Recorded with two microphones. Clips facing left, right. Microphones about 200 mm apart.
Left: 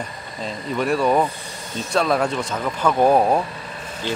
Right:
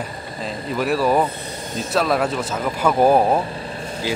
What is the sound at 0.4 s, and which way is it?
Speech, centre (ahead or behind).